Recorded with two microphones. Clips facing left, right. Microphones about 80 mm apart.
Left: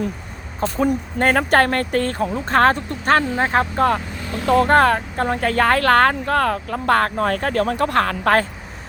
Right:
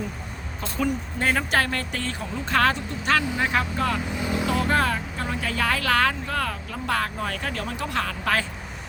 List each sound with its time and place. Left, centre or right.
0.9 s speech: left
4.2 s vehicle: centre
4.4 s speech: left